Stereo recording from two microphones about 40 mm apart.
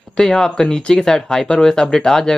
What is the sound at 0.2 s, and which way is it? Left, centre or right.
Speech, centre.